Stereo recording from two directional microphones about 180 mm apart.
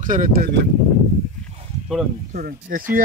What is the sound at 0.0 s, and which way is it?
Speech, 50° right (ahead or behind).